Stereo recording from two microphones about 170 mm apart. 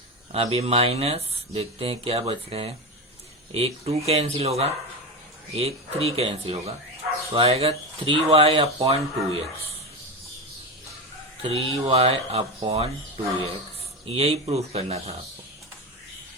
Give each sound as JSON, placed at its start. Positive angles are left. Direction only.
{"t": 0.3, "sound": "speech", "side_deg": -35}
{"t": 11.4, "sound": "speech", "side_deg": -35}
{"t": 14.1, "sound": "speech", "side_deg": -35}